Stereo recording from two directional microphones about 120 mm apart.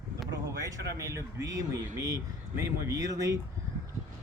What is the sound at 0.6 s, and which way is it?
Speech, 25° right (ahead or behind).